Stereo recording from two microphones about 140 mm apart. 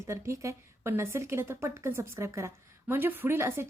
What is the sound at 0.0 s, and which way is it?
A woman's voice, 20° right (ahead or behind).